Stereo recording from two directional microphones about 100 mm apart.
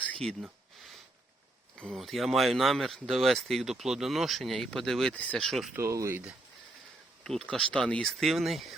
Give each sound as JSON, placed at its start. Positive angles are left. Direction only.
{"t": 0.0, "sound": "a sound", "side_deg": 10}
{"t": 1.8, "sound": "speech", "side_deg": 0}
{"t": 5.4, "sound": "speech", "side_deg": 0}
{"t": 5.7, "sound": "speech", "side_deg": -30}
{"t": 7.5, "sound": "speech", "side_deg": 5}